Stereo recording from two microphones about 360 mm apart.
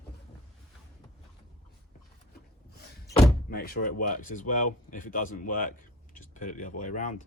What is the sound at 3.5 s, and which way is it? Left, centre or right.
Speech, left.